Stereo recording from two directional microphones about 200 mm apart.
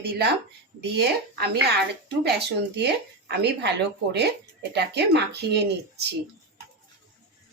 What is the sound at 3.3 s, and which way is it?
Speech, 55° right (ahead or behind).